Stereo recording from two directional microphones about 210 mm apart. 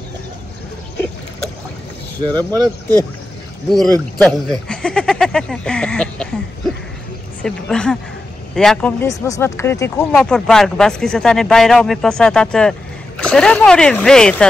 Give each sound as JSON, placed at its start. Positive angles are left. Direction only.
{"t": 0.9, "sound": "boat", "side_deg": 5}
{"t": 2.2, "sound": "speech", "side_deg": -20}
{"t": 3.7, "sound": "speech", "side_deg": 5}
{"t": 7.4, "sound": "speech", "side_deg": 5}
{"t": 9.0, "sound": "speech", "side_deg": 15}